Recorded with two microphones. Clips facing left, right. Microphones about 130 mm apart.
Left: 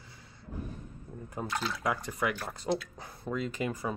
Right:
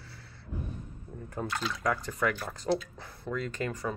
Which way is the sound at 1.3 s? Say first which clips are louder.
Even; 15° left (ahead or behind).